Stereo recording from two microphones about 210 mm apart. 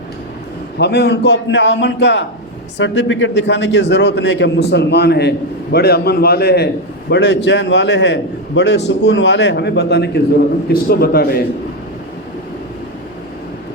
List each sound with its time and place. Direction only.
0.8 s a man's voice: 50° left (ahead or behind)